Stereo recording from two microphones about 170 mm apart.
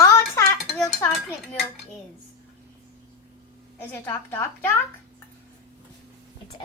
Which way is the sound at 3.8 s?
15° left (ahead or behind).